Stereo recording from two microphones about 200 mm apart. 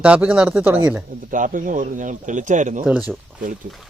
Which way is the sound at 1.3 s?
40° right (ahead or behind).